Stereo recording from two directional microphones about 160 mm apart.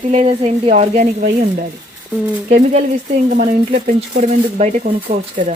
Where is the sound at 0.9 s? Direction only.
60° right (ahead or behind).